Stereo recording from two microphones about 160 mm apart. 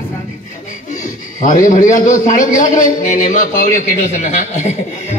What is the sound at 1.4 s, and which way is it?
A man's voice, 50° left (ahead or behind).